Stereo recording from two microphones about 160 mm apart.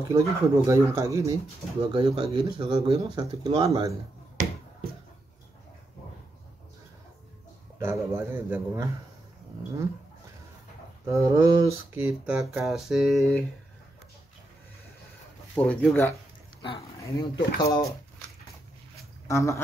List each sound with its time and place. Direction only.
0.1 s speech: 20° right (ahead or behind)
4.4 s finger snapping: 50° right (ahead or behind)
7.8 s speech: 15° right (ahead or behind)
11.1 s speech: 20° right (ahead or behind); by 13.5 s centre (ahead or behind)
15.5 s speech: 5° left (ahead or behind)
16.6 s speech: 25° left (ahead or behind)
19.2 s speech: 20° left (ahead or behind)